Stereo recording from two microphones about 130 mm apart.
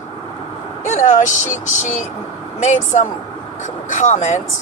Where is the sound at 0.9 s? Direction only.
70° left (ahead or behind).